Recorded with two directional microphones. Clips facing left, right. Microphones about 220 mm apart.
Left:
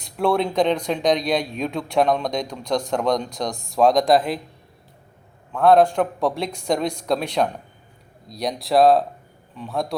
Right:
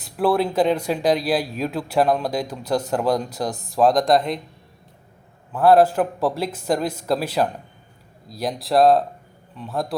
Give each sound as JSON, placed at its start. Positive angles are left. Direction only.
{"t": 0.0, "sound": "speech", "side_deg": -5}
{"t": 5.5, "sound": "speech", "side_deg": -5}